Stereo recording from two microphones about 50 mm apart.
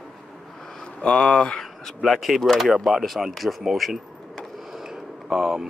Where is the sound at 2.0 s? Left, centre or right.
Centre.